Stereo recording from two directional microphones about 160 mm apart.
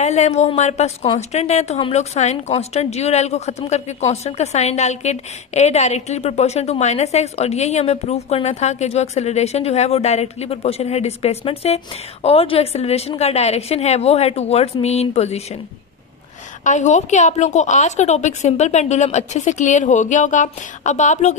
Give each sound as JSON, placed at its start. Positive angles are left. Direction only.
{"t": 0.0, "sound": "a woman's voice", "side_deg": 45}
{"t": 16.6, "sound": "a woman's voice", "side_deg": 50}